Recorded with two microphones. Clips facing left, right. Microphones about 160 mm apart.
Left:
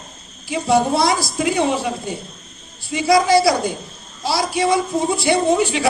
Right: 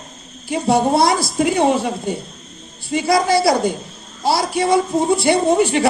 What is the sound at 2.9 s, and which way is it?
A woman's voice, 55° right (ahead or behind).